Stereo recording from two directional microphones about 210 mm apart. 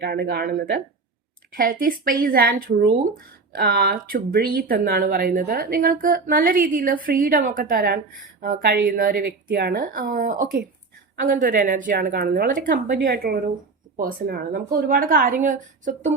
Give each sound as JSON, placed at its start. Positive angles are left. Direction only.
{"t": 0.0, "sound": "a woman's voice", "side_deg": -50}